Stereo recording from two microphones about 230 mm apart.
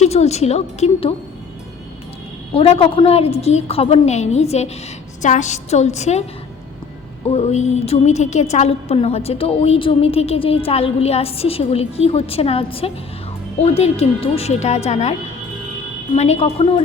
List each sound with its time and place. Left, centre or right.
0.0 s a woman's voice: left
2.6 s a woman's voice: left
7.3 s a woman's voice: left
16.1 s a woman's voice: left